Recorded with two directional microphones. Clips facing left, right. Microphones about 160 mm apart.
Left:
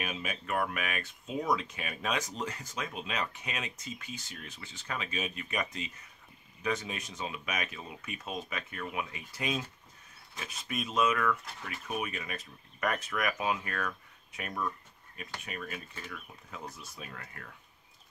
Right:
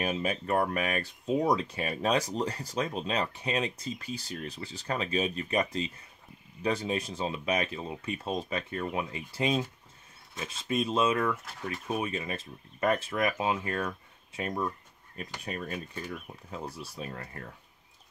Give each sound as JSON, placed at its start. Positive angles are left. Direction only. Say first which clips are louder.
{"t": 0.0, "sound": "speech", "louder": "right 7 dB", "side_deg": -35}